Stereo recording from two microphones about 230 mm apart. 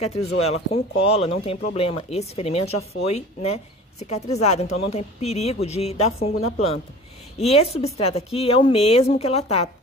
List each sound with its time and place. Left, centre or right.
0.0 s speech: left